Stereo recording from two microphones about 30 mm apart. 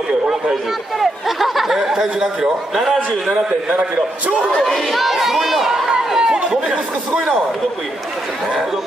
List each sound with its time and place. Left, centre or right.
0.3 s a man's voice: centre
4.5 s speech: left
4.9 s crowd: centre
5.9 s run: right